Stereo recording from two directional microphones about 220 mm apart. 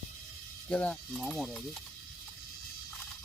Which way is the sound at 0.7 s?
5° left (ahead or behind).